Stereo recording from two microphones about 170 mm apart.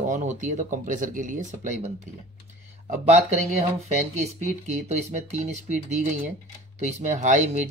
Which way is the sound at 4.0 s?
45° right (ahead or behind).